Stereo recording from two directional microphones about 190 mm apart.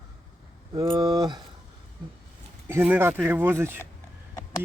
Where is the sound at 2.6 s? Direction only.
10° right (ahead or behind).